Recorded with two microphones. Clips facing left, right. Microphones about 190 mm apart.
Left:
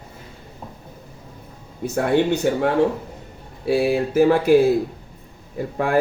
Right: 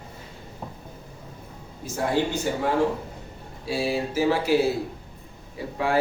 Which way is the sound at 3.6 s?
60° left (ahead or behind).